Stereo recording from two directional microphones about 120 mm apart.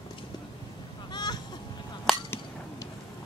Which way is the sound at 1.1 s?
35° left (ahead or behind).